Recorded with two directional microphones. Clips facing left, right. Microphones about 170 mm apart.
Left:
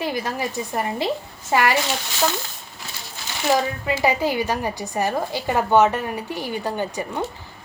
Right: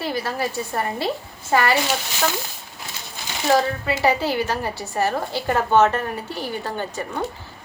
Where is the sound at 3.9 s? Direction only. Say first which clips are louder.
Even; 15° left (ahead or behind).